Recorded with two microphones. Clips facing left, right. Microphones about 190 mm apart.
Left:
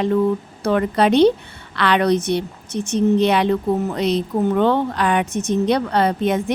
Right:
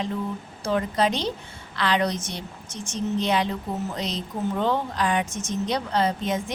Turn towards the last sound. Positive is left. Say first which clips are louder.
# left 7 dB
turn(degrees=60)  # may be behind; listen again after turning